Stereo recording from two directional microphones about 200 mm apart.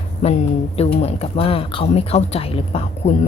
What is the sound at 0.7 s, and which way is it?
A woman's voice, 30° left (ahead or behind).